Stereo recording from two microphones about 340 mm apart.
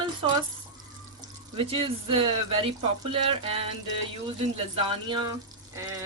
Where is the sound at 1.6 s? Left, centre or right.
Centre.